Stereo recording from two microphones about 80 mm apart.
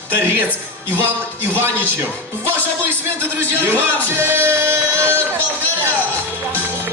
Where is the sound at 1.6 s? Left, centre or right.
Right.